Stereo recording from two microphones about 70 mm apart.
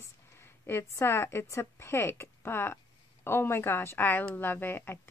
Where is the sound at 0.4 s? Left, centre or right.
Left.